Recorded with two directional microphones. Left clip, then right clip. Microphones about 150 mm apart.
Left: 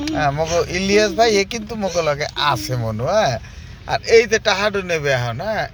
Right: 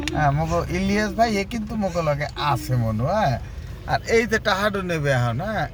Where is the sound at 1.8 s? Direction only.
50° left (ahead or behind).